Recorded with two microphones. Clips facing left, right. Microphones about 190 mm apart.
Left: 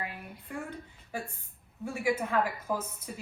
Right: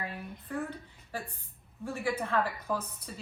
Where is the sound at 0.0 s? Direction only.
10° left (ahead or behind).